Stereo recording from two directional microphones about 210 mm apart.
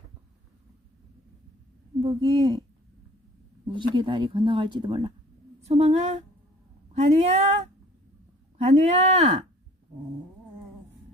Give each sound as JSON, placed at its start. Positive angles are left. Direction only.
{"t": 2.0, "sound": "speech", "side_deg": -25}
{"t": 3.7, "sound": "a woman's voice", "side_deg": -25}
{"t": 8.6, "sound": "a woman's voice", "side_deg": -35}